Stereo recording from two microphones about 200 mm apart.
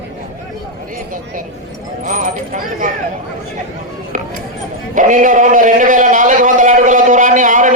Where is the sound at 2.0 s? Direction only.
40° right (ahead or behind).